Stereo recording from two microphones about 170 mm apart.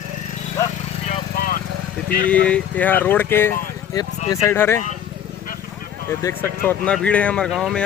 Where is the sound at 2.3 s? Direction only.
10° left (ahead or behind).